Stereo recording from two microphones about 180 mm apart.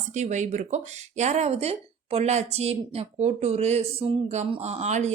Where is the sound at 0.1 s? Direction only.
40° right (ahead or behind).